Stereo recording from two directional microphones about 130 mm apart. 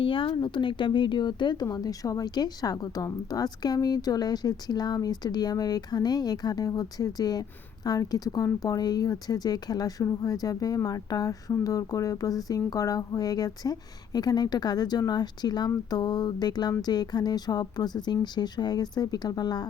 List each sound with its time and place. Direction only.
0.0 s a woman's voice: 40° left (ahead or behind)